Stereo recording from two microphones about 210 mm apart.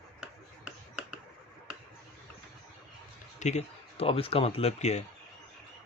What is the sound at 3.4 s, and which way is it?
Speech, 30° left (ahead or behind).